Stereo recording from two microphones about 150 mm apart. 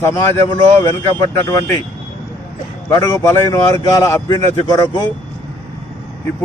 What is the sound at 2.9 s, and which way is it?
A man's voice, 25° left (ahead or behind).